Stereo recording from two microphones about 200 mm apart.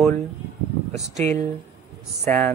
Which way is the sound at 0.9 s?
35° right (ahead or behind).